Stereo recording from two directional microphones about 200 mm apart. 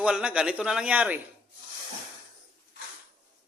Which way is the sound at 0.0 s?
5° right (ahead or behind).